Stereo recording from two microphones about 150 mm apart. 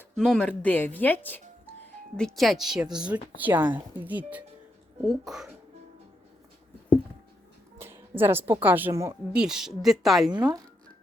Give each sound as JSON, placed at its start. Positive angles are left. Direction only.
{"t": 0.2, "sound": "speech", "side_deg": 5}
{"t": 7.8, "sound": "speech", "side_deg": -15}
{"t": 9.3, "sound": "speech", "side_deg": -5}
{"t": 10.3, "sound": "speech", "side_deg": -25}